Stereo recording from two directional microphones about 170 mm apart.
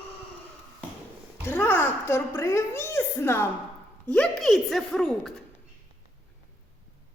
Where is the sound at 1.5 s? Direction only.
10° left (ahead or behind).